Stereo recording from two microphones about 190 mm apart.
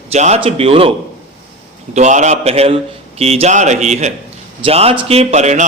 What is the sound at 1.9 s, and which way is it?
A man's voice, 40° right (ahead or behind).